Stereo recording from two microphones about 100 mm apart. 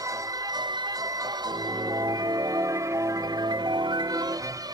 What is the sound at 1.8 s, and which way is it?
Music, 40° right (ahead or behind).